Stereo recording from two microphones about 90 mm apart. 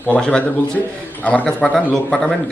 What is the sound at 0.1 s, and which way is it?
Speech, 15° left (ahead or behind).